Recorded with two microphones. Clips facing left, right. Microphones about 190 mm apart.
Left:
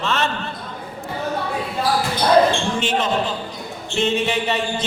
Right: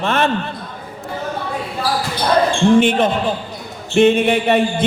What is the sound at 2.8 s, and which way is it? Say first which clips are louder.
A man's voice: right 7 dB; 55° right (ahead or behind).